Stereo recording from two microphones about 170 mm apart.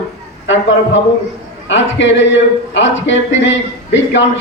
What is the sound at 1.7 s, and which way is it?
A man's voice, 90° left.